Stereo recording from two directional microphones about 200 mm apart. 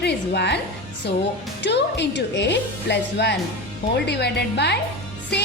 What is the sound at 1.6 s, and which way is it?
A woman's voice, 60° left (ahead or behind).